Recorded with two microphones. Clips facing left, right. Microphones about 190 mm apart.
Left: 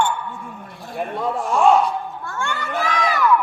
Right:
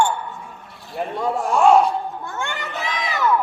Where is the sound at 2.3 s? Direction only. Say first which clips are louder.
Left 1 dB; 20° right (ahead or behind).